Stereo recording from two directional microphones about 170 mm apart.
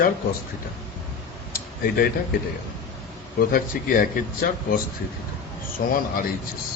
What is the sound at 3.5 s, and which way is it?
Speech, 55° left (ahead or behind).